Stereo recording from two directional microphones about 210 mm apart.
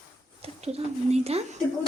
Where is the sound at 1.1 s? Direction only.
30° right (ahead or behind).